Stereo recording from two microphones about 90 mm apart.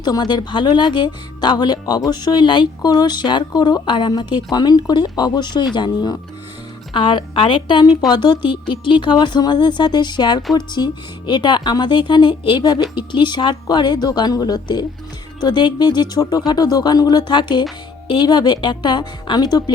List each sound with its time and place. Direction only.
0.0 s speech: 50° left (ahead or behind)